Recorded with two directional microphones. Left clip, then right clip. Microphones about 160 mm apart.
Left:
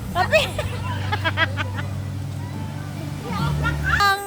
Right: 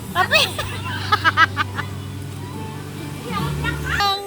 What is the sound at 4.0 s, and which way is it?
Music, 40° left (ahead or behind).